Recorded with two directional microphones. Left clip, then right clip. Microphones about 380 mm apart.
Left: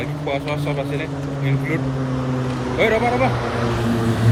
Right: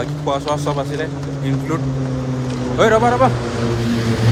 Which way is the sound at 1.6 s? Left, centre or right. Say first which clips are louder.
Right 1 dB; left.